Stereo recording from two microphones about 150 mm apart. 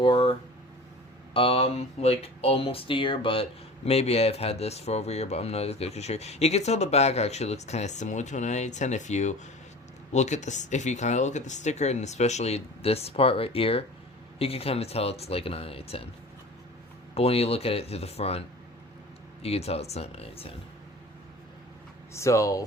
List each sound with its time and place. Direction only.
0.0 s a sound: 35° left (ahead or behind)
1.3 s speech: 40° left (ahead or behind)
17.2 s speech: 40° left (ahead or behind)
22.1 s speech: 20° left (ahead or behind)